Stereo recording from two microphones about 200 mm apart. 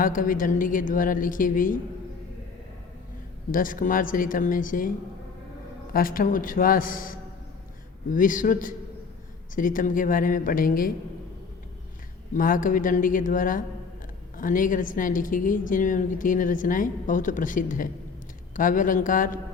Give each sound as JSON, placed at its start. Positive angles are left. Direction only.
{"t": 0.0, "sound": "a woman's voice", "side_deg": 45}
{"t": 3.5, "sound": "a woman's voice", "side_deg": 45}
{"t": 5.9, "sound": "a woman's voice", "side_deg": 45}
{"t": 12.3, "sound": "a woman's voice", "side_deg": 40}